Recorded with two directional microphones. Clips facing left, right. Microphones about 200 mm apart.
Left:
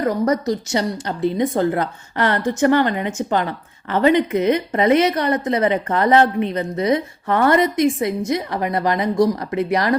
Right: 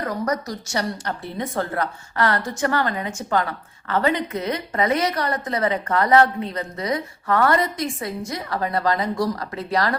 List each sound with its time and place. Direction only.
0.3 s a woman's voice: 20° left (ahead or behind)